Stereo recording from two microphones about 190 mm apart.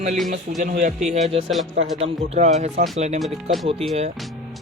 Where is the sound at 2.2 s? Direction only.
35° right (ahead or behind).